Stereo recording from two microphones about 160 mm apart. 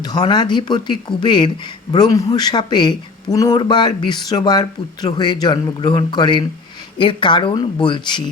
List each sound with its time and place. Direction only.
0.0 s a man's voice: 25° left (ahead or behind)